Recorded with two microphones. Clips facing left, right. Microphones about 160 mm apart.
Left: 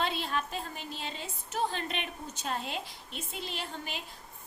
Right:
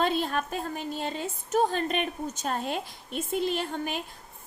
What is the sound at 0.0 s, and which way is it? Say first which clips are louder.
A woman's voice: right 6 dB; 45° right (ahead or behind).